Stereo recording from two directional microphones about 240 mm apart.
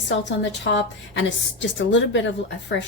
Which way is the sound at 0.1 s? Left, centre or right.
Left.